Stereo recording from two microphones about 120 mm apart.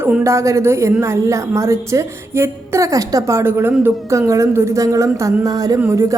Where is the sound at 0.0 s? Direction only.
20° right (ahead or behind).